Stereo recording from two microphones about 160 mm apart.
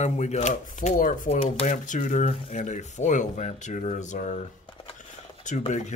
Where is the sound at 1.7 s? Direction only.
50° left (ahead or behind).